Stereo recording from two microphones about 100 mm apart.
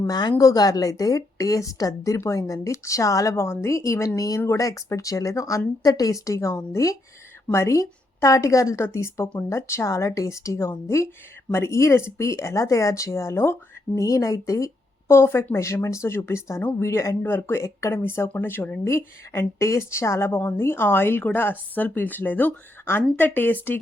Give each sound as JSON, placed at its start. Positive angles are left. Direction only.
{"t": 0.1, "sound": "a woman's voice", "side_deg": 45}